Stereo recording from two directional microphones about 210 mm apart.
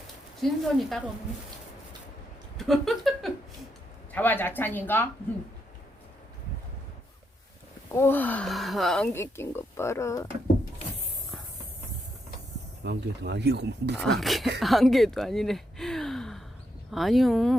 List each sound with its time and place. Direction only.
0.3 s speech: centre (ahead or behind)
2.6 s speech: centre (ahead or behind)
7.9 s speech: 10° left (ahead or behind)
9.1 s speech: 10° left (ahead or behind)
12.8 s speech: 50° right (ahead or behind)
14.0 s speech: centre (ahead or behind)